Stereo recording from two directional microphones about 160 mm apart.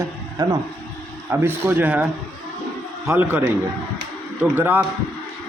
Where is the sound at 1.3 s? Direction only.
15° right (ahead or behind).